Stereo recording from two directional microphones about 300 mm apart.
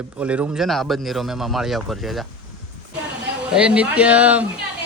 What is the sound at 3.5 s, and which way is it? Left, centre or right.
Speech, centre.